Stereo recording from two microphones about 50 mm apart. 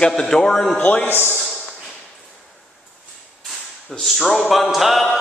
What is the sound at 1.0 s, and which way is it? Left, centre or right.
Speech, left.